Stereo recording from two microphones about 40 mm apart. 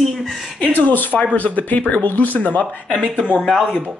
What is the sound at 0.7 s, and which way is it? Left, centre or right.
Speech, left.